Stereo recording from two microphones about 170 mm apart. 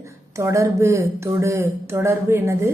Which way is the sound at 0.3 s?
15° right (ahead or behind).